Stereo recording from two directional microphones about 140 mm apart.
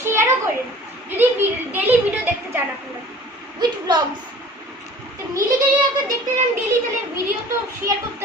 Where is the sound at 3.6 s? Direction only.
30° right (ahead or behind).